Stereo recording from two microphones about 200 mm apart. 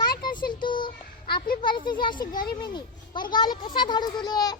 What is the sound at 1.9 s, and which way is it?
A child's voice, 25° left (ahead or behind).